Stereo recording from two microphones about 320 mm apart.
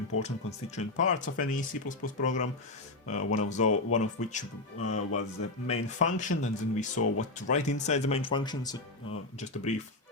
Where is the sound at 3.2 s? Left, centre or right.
Left.